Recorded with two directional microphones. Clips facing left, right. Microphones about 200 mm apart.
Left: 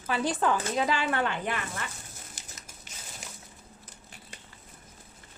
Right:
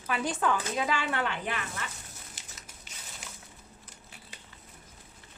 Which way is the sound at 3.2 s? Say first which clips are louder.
Left 1 dB; 45° left (ahead or behind).